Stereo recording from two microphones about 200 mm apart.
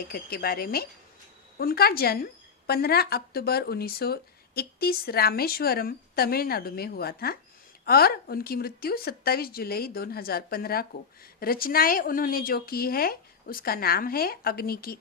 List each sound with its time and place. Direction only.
0.0 s a woman's voice: 50° left (ahead or behind)